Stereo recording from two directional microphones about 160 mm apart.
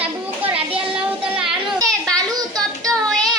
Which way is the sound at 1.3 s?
5° right (ahead or behind).